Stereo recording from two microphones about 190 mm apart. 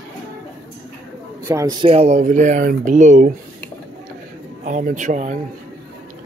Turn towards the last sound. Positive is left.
turn(degrees=-40)  # may be behind; listen again after turning